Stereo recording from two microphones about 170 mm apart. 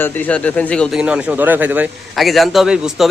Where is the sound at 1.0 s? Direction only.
5° right (ahead or behind).